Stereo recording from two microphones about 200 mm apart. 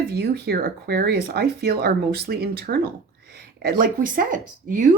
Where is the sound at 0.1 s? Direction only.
55° right (ahead or behind).